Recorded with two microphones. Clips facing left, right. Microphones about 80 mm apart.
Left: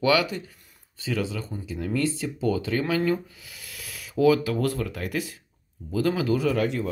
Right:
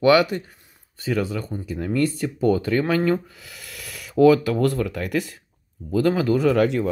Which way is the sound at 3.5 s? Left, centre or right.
Right.